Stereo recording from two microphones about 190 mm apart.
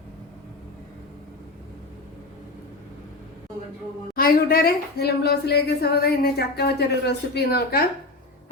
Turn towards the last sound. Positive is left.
turn(degrees=55)  # may be behind; listen again after turning